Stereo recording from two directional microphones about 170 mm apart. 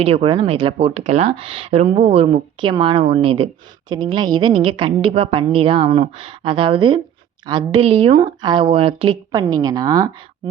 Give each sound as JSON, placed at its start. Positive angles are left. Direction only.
{"t": 0.0, "sound": "speech", "side_deg": -35}